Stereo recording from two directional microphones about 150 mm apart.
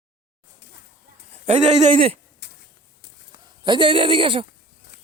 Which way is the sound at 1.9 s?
40° right (ahead or behind).